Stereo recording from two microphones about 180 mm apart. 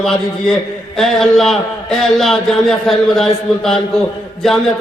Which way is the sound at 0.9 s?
Centre (ahead or behind).